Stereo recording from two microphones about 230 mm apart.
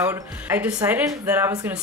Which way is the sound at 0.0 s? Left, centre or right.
Centre.